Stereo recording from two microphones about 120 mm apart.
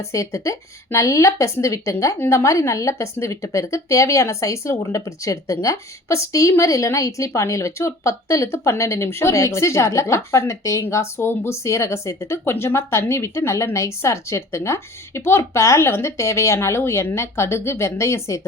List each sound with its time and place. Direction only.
0.0 s speech: 25° left (ahead or behind)